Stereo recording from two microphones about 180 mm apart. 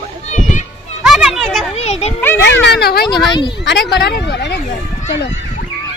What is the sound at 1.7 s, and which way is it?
Speech, 35° left (ahead or behind).